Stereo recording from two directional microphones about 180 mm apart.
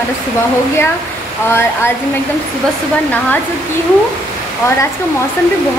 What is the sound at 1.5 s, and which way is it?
Speech, 15° left (ahead or behind).